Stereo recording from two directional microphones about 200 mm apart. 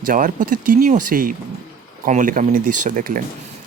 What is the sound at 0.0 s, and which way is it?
Speech, 45° right (ahead or behind).